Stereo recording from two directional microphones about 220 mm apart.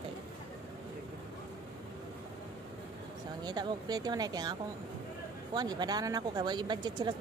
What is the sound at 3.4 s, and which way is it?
Speech, 20° right (ahead or behind).